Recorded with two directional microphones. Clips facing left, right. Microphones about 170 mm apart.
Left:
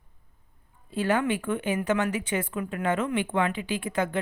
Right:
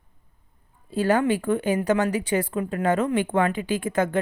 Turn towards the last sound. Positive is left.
turn(degrees=-45)  # may be behind; listen again after turning